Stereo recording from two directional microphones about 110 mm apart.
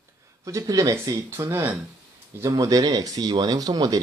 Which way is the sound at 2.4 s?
35° right (ahead or behind).